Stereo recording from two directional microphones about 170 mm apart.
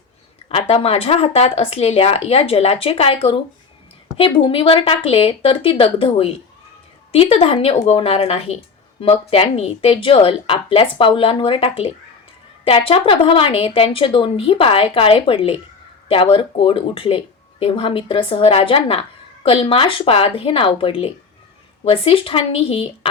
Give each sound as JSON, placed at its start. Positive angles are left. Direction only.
{"t": 0.4, "sound": "speech", "side_deg": 35}